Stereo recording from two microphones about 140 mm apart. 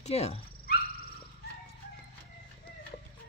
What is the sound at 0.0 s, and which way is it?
Speech, 45° left (ahead or behind).